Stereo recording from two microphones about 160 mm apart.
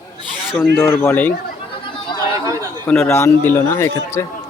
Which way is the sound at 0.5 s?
5° left (ahead or behind).